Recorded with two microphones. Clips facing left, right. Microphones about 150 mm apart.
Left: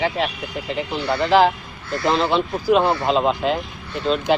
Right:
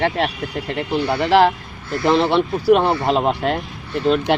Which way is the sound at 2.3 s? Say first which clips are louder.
Right 3 dB; 60° right (ahead or behind).